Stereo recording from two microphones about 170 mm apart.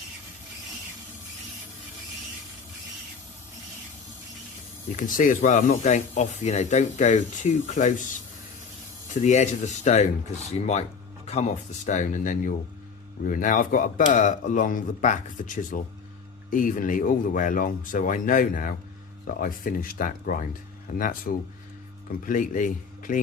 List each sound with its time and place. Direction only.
4.9 s speech: 50° left (ahead or behind)
9.2 s speech: 45° left (ahead or behind)